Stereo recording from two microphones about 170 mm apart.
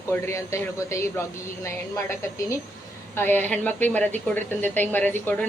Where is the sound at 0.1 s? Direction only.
15° left (ahead or behind).